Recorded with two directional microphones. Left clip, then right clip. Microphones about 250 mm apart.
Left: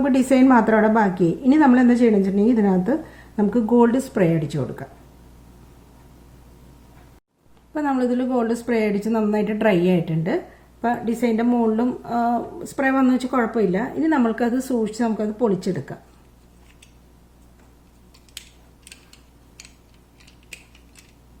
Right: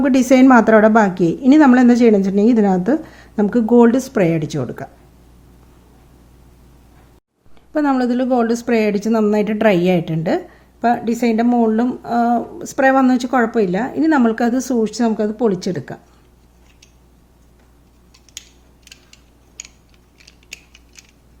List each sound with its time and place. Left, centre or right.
0.0 s a woman's voice: right
7.7 s a woman's voice: right